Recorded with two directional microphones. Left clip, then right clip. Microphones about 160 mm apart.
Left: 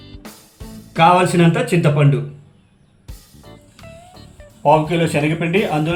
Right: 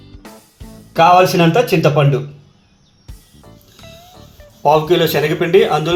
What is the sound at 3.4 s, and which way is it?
Speech, centre (ahead or behind).